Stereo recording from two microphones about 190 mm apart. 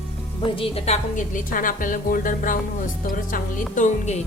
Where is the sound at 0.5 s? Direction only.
30° left (ahead or behind).